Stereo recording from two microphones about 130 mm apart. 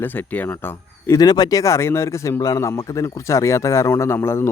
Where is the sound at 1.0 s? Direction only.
30° left (ahead or behind).